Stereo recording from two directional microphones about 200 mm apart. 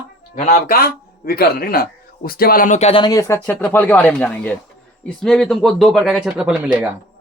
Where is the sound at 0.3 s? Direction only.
40° left (ahead or behind).